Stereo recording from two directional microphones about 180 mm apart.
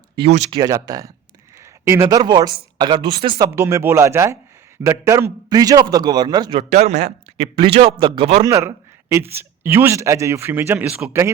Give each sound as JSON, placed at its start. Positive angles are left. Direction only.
{"t": 0.2, "sound": "a man's voice", "side_deg": -40}
{"t": 0.6, "sound": "a man's voice", "side_deg": -20}
{"t": 8.4, "sound": "a man's voice", "side_deg": -15}